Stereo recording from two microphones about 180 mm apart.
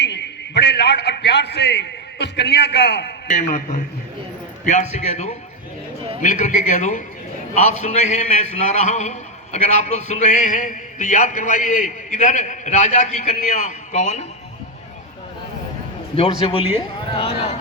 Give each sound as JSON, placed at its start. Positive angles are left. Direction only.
{"t": 0.0, "sound": "a man's voice", "side_deg": 70}
{"t": 3.2, "sound": "a man's voice", "side_deg": 40}
{"t": 4.6, "sound": "a man's voice", "side_deg": 40}
{"t": 16.1, "sound": "a man's voice", "side_deg": 30}